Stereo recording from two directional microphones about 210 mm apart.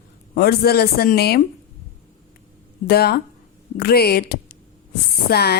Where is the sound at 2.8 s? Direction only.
50° left (ahead or behind).